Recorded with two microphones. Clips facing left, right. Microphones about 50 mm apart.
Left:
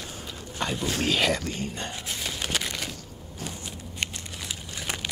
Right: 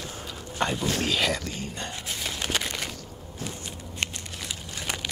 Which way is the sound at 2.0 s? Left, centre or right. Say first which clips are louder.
Right 2 dB; centre.